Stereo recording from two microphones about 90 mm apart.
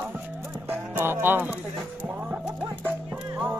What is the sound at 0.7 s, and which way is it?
Speech, 25° right (ahead or behind).